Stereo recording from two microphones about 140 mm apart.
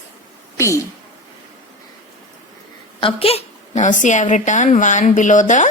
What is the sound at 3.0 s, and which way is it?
A woman's voice, 45° left (ahead or behind).